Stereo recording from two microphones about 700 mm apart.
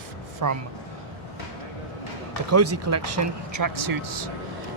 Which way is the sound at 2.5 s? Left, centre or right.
Centre.